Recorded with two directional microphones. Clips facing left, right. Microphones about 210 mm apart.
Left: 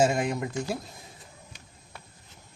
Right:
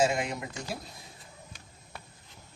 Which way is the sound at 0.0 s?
50° left (ahead or behind).